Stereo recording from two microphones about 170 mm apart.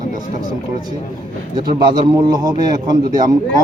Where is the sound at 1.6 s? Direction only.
25° right (ahead or behind).